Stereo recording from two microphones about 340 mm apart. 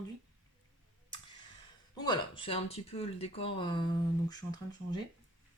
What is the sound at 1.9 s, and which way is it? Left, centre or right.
Speech, centre.